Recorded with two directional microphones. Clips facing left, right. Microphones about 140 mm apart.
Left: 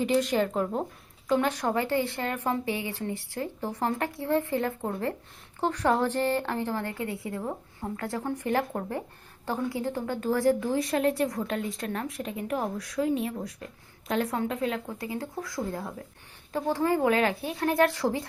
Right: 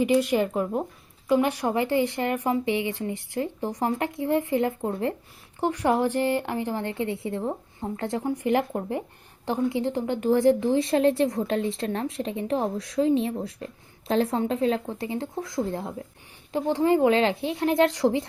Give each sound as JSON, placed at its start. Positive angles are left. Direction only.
{"t": 0.0, "sound": "a woman's voice", "side_deg": -10}